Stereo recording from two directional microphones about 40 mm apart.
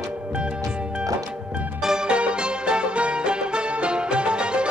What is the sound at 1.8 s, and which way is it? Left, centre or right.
Music, centre.